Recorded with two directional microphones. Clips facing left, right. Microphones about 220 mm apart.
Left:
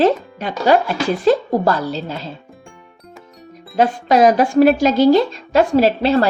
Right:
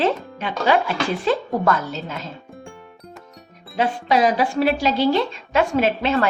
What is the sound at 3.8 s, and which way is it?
A woman's voice, 45° left (ahead or behind).